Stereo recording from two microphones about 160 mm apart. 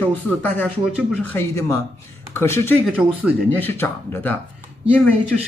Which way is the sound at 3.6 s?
15° left (ahead or behind).